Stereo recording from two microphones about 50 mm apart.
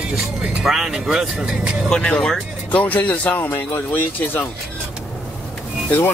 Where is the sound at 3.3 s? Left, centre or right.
Left.